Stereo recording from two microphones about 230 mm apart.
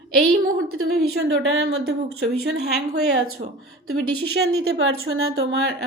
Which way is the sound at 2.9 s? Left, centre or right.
Right.